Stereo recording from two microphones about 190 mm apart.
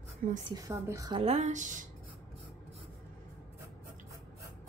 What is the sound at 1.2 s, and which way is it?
Speech, 35° right (ahead or behind).